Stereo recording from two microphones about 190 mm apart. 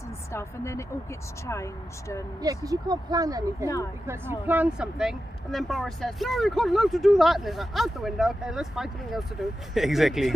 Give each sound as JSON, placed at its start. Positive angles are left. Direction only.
{"t": 0.3, "sound": "speech", "side_deg": 15}
{"t": 2.4, "sound": "speech", "side_deg": -20}